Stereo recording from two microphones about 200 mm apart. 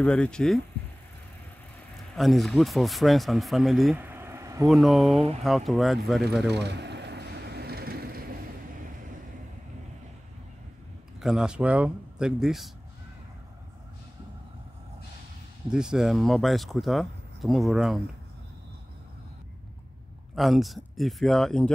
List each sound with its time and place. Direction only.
0.0 s speech: 5° left (ahead or behind)
2.1 s speech: centre (ahead or behind)
4.6 s speech: centre (ahead or behind)
6.5 s vehicle: 60° right (ahead or behind)
11.1 s speech: 5° right (ahead or behind)
15.7 s speech: 5° right (ahead or behind)
20.3 s speech: centre (ahead or behind)